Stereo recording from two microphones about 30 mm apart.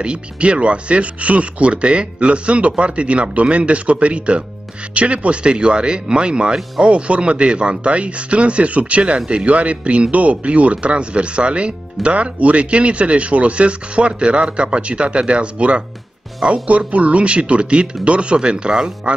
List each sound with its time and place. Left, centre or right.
0.0 s speech: right
16.6 s speech: right